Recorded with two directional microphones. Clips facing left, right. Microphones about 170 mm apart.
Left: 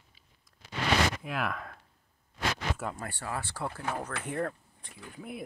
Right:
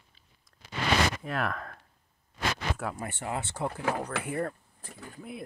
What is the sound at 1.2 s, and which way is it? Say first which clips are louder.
Speech: right 2 dB; centre (ahead or behind).